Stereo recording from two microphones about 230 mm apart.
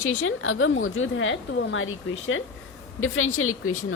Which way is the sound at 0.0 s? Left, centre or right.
Left.